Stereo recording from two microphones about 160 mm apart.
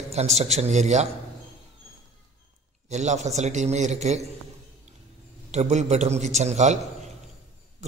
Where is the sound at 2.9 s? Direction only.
45° right (ahead or behind).